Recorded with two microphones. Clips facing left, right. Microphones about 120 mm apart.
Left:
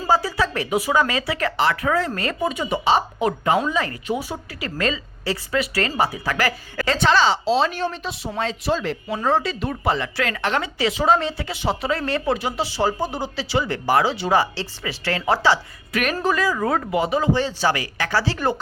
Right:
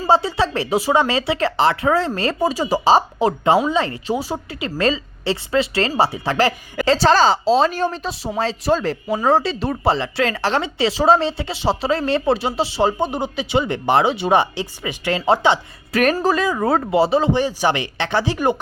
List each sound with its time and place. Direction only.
0.1 s speech: 25° right (ahead or behind)
15.9 s speech: 40° right (ahead or behind)
16.2 s speech: 25° right (ahead or behind)
17.3 s speech: 15° right (ahead or behind)